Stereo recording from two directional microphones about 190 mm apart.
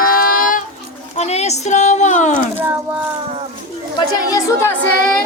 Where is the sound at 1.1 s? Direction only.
35° left (ahead or behind).